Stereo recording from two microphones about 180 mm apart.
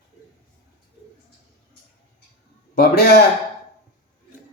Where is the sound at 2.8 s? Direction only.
60° left (ahead or behind).